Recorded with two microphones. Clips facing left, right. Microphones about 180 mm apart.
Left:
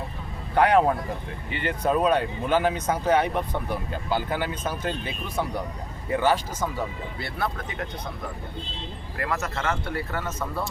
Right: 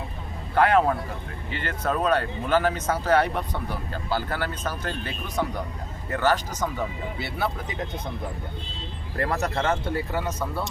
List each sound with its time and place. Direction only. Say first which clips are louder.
0.5 s speech: left 1 dB; 15° left (ahead or behind)
7.2 s speech: right 1 dB; 5° right (ahead or behind)
9.1 s speech: right 4 dB; 35° right (ahead or behind)
9.9 s speech: right 3 dB; 15° right (ahead or behind)